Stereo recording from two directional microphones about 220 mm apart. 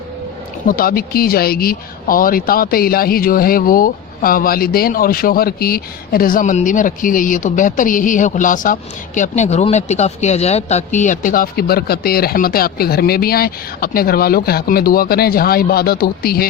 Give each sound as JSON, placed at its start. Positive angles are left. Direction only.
{"t": 0.7, "sound": "speech", "side_deg": 40}